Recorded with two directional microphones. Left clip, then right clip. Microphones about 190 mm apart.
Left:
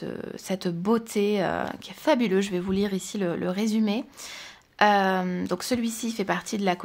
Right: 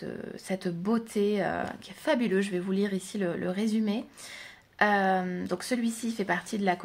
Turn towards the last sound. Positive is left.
turn(degrees=35)  # may be behind; listen again after turning